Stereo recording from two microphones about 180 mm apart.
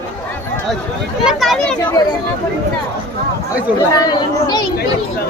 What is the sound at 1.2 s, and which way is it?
Speech, centre (ahead or behind).